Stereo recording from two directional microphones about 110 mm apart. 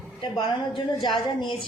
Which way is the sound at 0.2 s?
40° left (ahead or behind).